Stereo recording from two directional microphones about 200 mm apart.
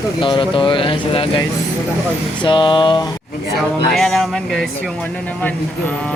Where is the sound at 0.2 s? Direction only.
25° left (ahead or behind).